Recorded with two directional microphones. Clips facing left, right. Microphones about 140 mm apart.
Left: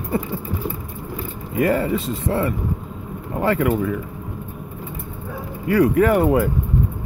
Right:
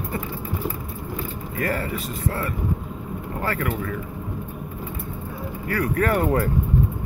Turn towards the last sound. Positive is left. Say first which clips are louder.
# left 5 dB
turn(degrees=10)  # may be behind; listen again after turning